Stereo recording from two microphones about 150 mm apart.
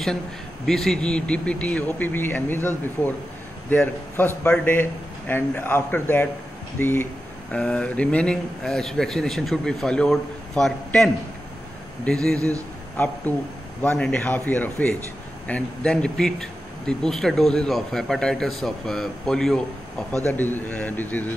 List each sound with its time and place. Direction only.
0.7 s a man's voice: centre (ahead or behind)
3.7 s a man's voice: 15° left (ahead or behind)
7.5 s a man's voice: 5° left (ahead or behind)
12.4 s a man's voice: 20° right (ahead or behind)
12.9 s a man's voice: 15° left (ahead or behind)
13.8 s a man's voice: centre (ahead or behind)
14.1 s a man's voice: 15° left (ahead or behind)